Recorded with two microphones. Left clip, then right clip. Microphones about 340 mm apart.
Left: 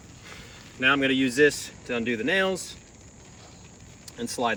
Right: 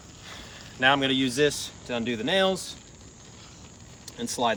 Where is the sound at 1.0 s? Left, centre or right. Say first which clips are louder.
Left 3 dB; right.